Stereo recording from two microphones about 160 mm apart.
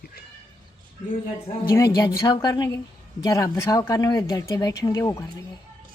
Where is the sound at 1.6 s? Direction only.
25° left (ahead or behind).